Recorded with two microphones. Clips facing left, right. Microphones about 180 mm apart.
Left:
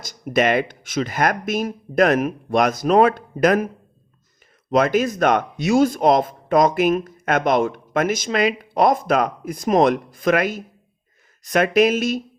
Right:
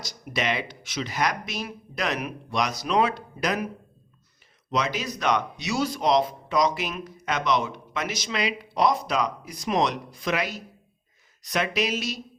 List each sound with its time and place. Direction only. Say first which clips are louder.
0.0 s speech: left 10 dB; 50° left (ahead or behind)
4.7 s speech: left 10 dB; 50° left (ahead or behind)